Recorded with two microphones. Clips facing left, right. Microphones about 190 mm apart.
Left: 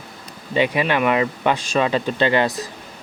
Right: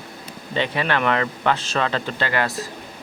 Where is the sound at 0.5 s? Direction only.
15° left (ahead or behind).